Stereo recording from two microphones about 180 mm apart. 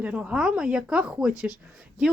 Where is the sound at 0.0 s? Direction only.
5° right (ahead or behind).